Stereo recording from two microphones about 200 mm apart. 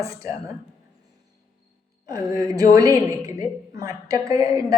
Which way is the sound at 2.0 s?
15° right (ahead or behind).